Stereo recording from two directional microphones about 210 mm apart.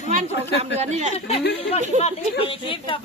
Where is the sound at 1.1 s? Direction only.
30° left (ahead or behind).